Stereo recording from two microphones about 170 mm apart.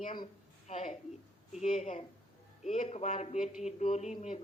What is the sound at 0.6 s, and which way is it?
Speech, 40° left (ahead or behind).